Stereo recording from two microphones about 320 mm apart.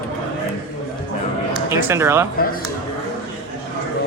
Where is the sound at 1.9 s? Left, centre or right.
Centre.